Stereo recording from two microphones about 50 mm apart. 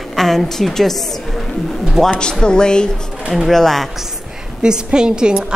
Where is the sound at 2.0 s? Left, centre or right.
Centre.